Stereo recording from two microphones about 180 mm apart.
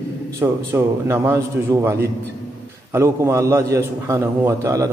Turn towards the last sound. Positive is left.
turn(degrees=-20)  # may be behind; listen again after turning